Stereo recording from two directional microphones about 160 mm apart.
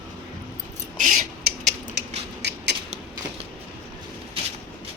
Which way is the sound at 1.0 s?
55° right (ahead or behind).